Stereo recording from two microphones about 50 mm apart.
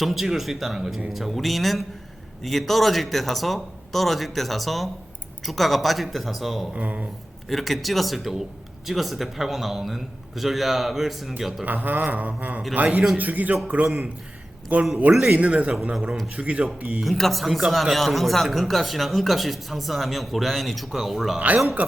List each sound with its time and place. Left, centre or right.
0.0 s speech: centre
6.7 s a man's voice: right
7.5 s speech: centre
11.6 s a man's voice: right
14.7 s a man's voice: right
15.1 s a man's voice: centre
15.4 s speech: right
15.7 s a man's voice: centre
17.0 s speech: centre
21.3 s a man's voice: right